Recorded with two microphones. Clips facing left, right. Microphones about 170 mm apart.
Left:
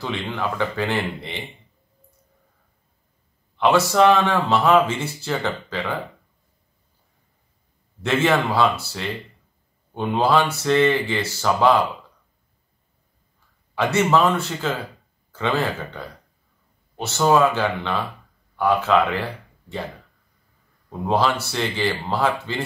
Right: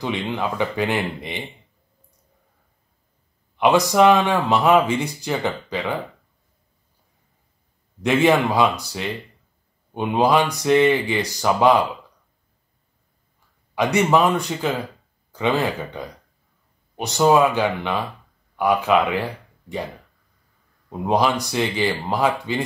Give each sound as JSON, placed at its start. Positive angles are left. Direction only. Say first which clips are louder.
{"t": 0.3, "sound": "speech", "louder": "right 1 dB", "side_deg": -15}
{"t": 3.5, "sound": "speech", "louder": "right 1 dB", "side_deg": -15}
{"t": 8.0, "sound": "speech", "louder": "right 3 dB", "side_deg": -15}
{"t": 13.7, "sound": "speech", "louder": "right 1 dB", "side_deg": -15}
{"t": 21.0, "sound": "speech", "louder": "right 1 dB", "side_deg": -15}